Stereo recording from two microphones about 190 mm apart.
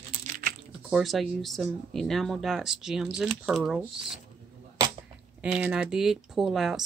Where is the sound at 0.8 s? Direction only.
Centre (ahead or behind).